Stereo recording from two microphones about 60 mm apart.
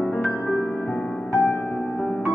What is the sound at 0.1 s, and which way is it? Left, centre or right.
Music, left.